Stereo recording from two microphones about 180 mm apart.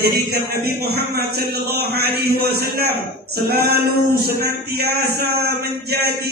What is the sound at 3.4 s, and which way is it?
A man's voice, 55° right (ahead or behind).